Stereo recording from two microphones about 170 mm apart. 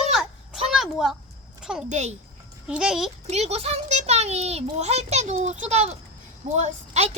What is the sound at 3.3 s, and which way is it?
A child's voice, 40° right (ahead or behind).